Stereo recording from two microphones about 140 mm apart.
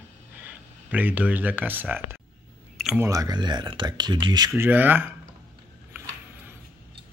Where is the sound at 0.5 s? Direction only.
10° right (ahead or behind).